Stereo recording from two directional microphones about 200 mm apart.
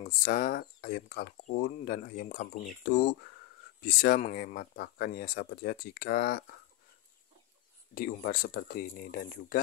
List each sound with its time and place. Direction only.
0.0 s speech: 45° left (ahead or behind)
7.9 s speech: 45° left (ahead or behind)